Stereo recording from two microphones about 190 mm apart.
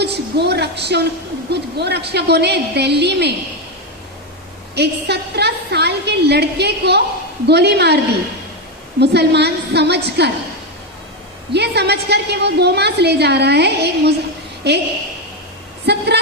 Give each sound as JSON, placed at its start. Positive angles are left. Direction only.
{"t": 0.0, "sound": "a woman's voice", "side_deg": -60}
{"t": 4.7, "sound": "a woman's voice", "side_deg": -60}
{"t": 9.0, "sound": "a woman's voice", "side_deg": -60}
{"t": 11.5, "sound": "a woman's voice", "side_deg": -60}
{"t": 15.9, "sound": "a woman's voice", "side_deg": -60}